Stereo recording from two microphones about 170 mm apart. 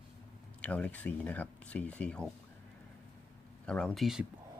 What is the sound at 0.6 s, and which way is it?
Speech, 5° left (ahead or behind).